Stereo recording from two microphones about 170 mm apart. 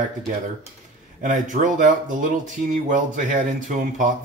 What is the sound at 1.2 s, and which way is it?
Speech, 50° right (ahead or behind).